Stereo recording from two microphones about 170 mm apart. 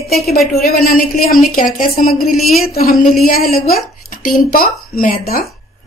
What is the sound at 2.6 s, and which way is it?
Speech, 60° left (ahead or behind).